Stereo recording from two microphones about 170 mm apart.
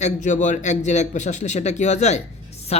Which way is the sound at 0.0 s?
50° left (ahead or behind).